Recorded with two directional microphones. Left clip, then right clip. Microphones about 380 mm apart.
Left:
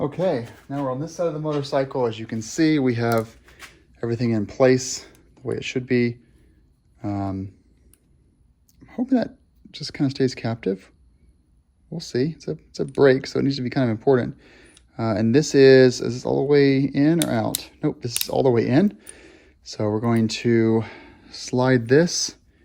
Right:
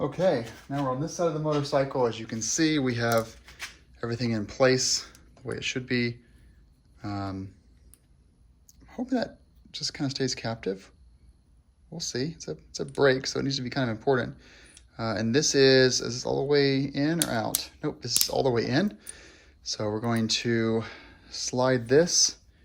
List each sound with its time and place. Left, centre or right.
0.0 s speech: left
8.8 s a sound: centre
9.7 s speech: centre
11.9 s speech: centre